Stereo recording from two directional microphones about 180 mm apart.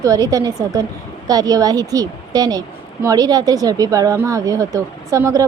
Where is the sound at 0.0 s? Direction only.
20° right (ahead or behind).